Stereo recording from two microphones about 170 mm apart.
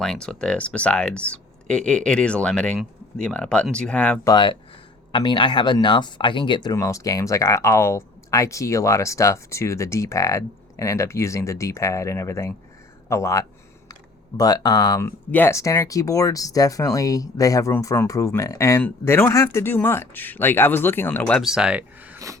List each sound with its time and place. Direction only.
0.0 s speech: 5° left (ahead or behind)
4.3 s speech: 25° left (ahead or behind)
15.0 s speech: 10° left (ahead or behind); by 22.2 s 10° right (ahead or behind)